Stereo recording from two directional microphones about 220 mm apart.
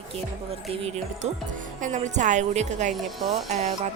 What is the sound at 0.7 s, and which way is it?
A woman's voice, 25° right (ahead or behind).